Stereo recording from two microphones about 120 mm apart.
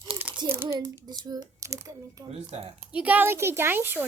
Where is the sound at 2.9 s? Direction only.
10° right (ahead or behind).